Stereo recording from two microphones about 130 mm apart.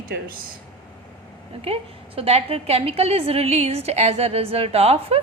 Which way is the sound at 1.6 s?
50° right (ahead or behind).